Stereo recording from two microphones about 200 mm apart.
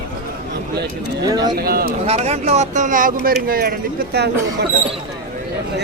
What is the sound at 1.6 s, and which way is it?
Speech, 50° right (ahead or behind).